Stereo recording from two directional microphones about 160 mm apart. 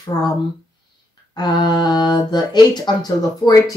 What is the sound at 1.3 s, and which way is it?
Speech, 25° left (ahead or behind).